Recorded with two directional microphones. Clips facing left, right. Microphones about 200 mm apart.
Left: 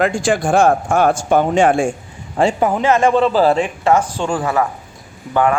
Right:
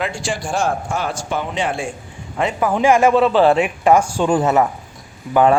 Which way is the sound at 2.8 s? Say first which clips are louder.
Right 2 dB; 10° right (ahead or behind).